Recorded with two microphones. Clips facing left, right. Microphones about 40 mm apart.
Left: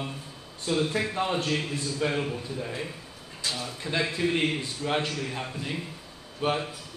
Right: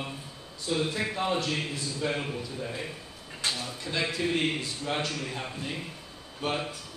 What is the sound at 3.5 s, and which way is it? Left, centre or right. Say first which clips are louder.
A man's voice: left 3 dB; left.